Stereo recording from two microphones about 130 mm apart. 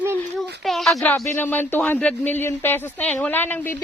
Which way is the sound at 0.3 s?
Centre (ahead or behind).